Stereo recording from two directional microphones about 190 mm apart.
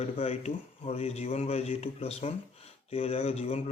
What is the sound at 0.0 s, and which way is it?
Speech, 35° left (ahead or behind).